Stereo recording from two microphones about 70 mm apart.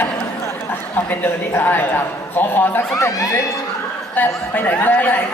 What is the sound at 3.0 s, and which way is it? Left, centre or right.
Speech, left.